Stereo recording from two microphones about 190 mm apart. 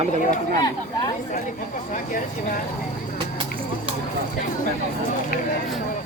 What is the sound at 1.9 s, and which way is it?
Speech, 45° left (ahead or behind).